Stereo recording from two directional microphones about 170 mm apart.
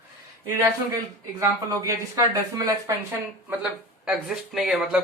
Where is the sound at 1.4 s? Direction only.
20° right (ahead or behind); by 5.0 s 5° right (ahead or behind).